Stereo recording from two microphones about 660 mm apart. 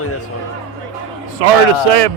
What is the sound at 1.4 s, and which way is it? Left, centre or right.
Speech, right.